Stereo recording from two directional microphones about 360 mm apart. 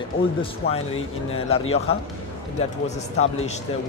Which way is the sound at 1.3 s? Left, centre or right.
Centre.